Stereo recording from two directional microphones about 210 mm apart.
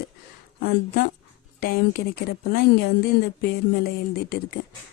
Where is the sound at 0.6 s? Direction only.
45° left (ahead or behind).